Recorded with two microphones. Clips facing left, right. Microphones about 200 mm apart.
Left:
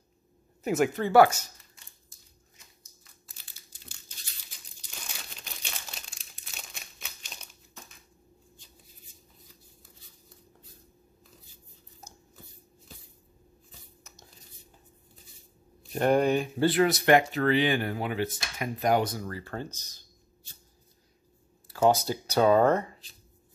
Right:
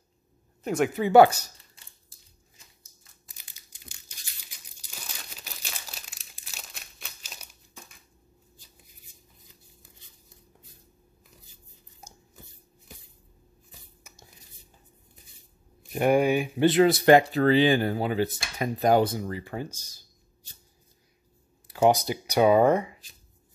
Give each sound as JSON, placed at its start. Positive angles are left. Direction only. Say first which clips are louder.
{"t": 0.7, "sound": "speech", "louder": "even", "side_deg": 5}
{"t": 3.3, "sound": "crumpling", "louder": "left 1 dB", "side_deg": -15}
{"t": 4.9, "sound": "crumpling", "louder": "even", "side_deg": -5}
{"t": 12.0, "sound": "chopping", "louder": "right 1 dB", "side_deg": -10}
{"t": 12.9, "sound": "squish", "louder": "right 2 dB", "side_deg": -15}
{"t": 13.7, "sound": "a sound", "louder": "right 1 dB", "side_deg": -10}
{"t": 15.9, "sound": "speech", "louder": "right 2 dB", "side_deg": -10}
{"t": 16.6, "sound": "speech", "louder": "right 4 dB", "side_deg": -20}
{"t": 17.0, "sound": "speech", "louder": "right 4 dB", "side_deg": -35}
{"t": 21.6, "sound": "speech", "louder": "right 2 dB", "side_deg": -15}